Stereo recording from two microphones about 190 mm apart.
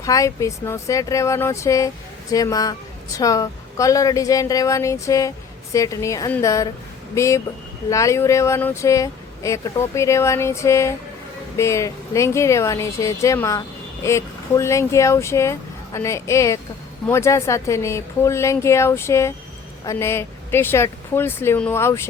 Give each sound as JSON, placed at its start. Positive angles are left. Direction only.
{"t": 0.0, "sound": "speech", "side_deg": 15}